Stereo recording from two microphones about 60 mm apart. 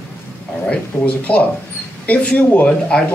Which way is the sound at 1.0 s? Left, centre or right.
Left.